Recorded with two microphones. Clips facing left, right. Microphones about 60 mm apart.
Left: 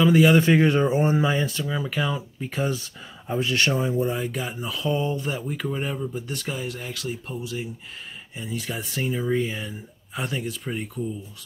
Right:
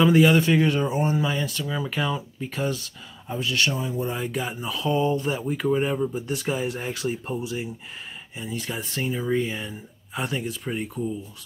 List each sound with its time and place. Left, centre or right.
0.0 s speech: centre
0.4 s speech: left
1.7 s speech: centre
3.3 s speech: left
4.1 s speech: centre
6.6 s speech: right
8.4 s speech: centre